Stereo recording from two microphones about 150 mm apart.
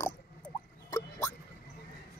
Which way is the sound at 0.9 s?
20° left (ahead or behind).